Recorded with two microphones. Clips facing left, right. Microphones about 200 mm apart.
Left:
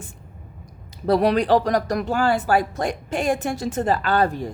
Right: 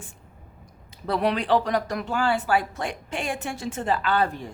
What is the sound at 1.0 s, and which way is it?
Speech, 40° left (ahead or behind).